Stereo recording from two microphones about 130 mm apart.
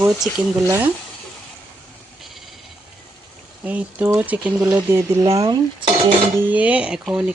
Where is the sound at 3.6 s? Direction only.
10° right (ahead or behind).